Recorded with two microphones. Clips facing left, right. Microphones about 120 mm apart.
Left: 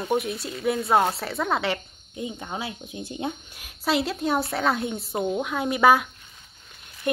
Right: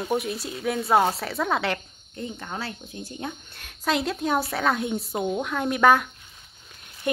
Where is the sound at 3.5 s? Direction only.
5° left (ahead or behind).